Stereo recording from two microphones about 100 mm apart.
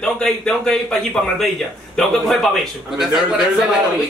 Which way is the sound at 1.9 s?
5° left (ahead or behind).